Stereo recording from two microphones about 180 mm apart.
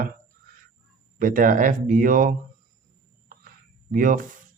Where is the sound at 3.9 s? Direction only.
50° right (ahead or behind).